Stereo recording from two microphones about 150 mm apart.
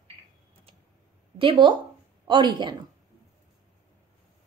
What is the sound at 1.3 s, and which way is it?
A woman's voice, 35° right (ahead or behind).